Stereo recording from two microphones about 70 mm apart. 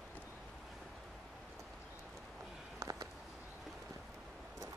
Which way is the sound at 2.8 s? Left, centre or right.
Right.